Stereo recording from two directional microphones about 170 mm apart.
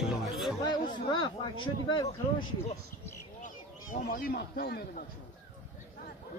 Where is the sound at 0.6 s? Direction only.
25° left (ahead or behind).